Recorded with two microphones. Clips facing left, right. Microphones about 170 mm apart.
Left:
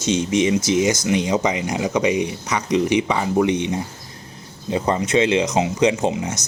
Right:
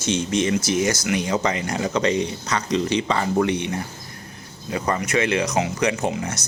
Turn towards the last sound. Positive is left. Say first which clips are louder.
# left 3 dB
turn(degrees=20)  # may be behind; listen again after turning